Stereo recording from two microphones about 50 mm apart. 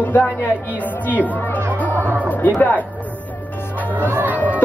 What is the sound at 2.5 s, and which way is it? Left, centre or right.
Speech, left.